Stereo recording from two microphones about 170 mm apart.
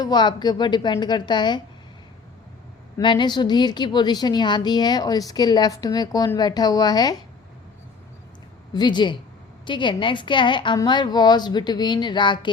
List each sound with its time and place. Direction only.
0.0 s a woman's voice: 25° left (ahead or behind)
3.0 s a woman's voice: 30° left (ahead or behind)
8.7 s a woman's voice: 25° left (ahead or behind)